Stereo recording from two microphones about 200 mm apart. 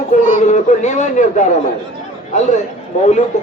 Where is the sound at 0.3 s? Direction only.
35° left (ahead or behind).